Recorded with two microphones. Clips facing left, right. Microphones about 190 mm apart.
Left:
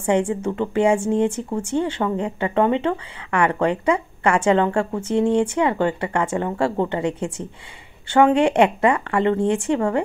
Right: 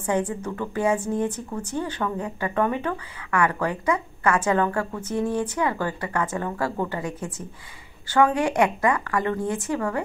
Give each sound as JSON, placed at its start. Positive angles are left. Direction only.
{"t": 0.4, "sound": "speech", "side_deg": 25}